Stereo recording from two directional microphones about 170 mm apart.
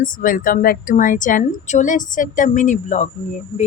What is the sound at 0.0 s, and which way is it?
Speech, 50° left (ahead or behind).